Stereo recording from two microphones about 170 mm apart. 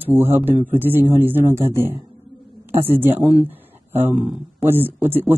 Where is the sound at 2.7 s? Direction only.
15° right (ahead or behind).